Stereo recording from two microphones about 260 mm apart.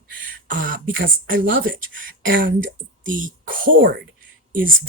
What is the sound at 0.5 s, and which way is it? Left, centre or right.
Speech, right.